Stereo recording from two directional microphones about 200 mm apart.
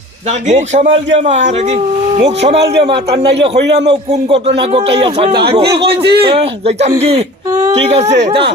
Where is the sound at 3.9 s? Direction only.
35° right (ahead or behind).